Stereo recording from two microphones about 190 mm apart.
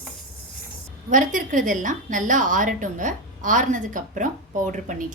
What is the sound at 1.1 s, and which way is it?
A woman's voice, 45° right (ahead or behind).